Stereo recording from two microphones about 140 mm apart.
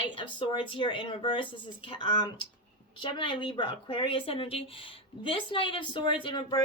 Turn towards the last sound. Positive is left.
turn(degrees=35)  # may be behind; listen again after turning